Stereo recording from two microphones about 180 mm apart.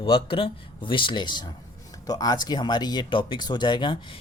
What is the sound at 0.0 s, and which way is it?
Speech, 30° left (ahead or behind).